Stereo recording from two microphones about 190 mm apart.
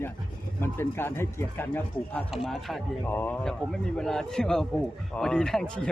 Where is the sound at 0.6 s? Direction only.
10° left (ahead or behind).